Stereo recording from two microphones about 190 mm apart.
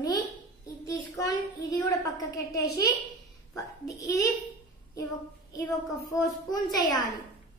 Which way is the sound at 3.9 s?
15° left (ahead or behind).